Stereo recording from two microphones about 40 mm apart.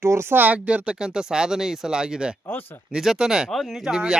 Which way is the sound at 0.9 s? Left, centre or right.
Centre.